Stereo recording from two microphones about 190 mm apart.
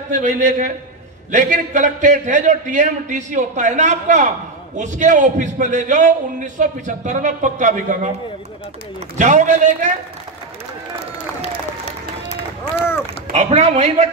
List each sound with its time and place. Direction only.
0.1 s a man's voice: 40° right (ahead or behind)
9.2 s a man's voice: 40° right (ahead or behind)
13.3 s a man's voice: 30° right (ahead or behind)